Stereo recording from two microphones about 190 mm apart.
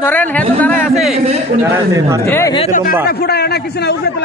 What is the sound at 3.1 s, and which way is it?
A man's voice, 55° left (ahead or behind).